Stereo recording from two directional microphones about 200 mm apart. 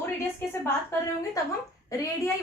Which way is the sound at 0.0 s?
10° left (ahead or behind).